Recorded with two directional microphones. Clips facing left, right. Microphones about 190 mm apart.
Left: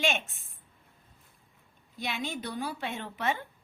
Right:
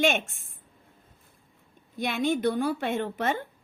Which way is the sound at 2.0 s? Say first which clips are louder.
Right 9 dB; 50° right (ahead or behind).